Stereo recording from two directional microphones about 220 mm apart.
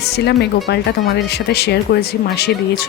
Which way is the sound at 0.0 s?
50° left (ahead or behind).